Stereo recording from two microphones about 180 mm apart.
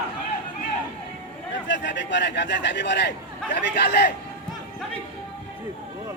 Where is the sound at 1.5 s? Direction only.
80° left.